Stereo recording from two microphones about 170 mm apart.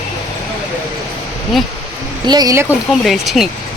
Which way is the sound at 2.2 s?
20° right (ahead or behind).